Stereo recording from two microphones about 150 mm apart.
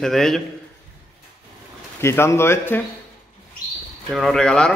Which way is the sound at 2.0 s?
15° left (ahead or behind).